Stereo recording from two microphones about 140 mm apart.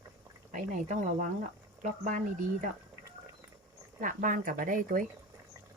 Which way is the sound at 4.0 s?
75° right (ahead or behind).